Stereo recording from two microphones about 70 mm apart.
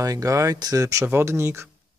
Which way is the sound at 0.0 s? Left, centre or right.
Right.